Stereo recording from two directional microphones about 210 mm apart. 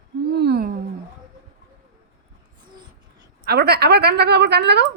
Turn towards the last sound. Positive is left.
turn(degrees=-50)  # may be behind; listen again after turning